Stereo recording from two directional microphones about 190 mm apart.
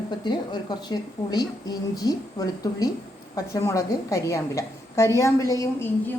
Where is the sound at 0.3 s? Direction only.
20° left (ahead or behind).